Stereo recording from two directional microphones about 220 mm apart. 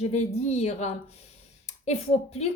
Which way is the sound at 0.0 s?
30° left (ahead or behind).